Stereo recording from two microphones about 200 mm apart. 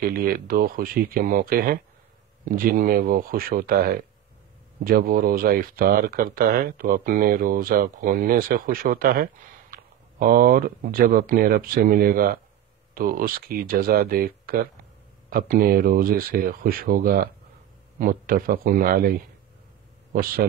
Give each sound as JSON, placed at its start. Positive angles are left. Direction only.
{"t": 0.0, "sound": "a man's voice", "side_deg": -45}